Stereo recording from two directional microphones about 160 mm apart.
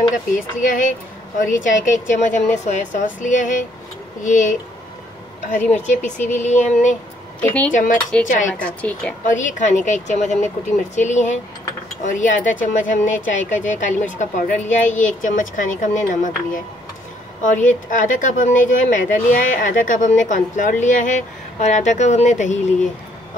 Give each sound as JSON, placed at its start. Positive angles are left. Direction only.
{"t": 0.6, "sound": "speech", "side_deg": 55}
{"t": 7.3, "sound": "a woman's voice", "side_deg": 10}
{"t": 7.7, "sound": "speech", "side_deg": 55}
{"t": 8.5, "sound": "a woman's voice", "side_deg": 10}
{"t": 9.2, "sound": "speech", "side_deg": 50}